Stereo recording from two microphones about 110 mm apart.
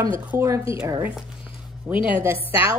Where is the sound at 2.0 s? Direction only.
15° right (ahead or behind).